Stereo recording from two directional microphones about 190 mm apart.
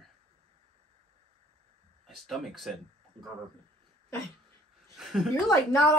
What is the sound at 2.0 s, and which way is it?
Speech, centre (ahead or behind).